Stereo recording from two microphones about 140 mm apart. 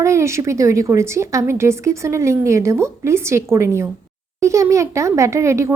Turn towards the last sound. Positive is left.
turn(degrees=-20)  # may be behind; listen again after turning